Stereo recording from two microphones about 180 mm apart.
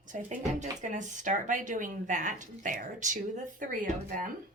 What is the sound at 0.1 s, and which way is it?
Speech, 45° right (ahead or behind).